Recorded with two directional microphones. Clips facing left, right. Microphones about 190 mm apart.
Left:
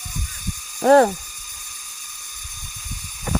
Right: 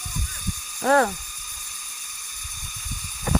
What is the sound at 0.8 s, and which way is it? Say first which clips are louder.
Speech: left 6 dB; 30° left (ahead or behind).